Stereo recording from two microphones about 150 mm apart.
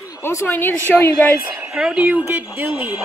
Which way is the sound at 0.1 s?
20° left (ahead or behind).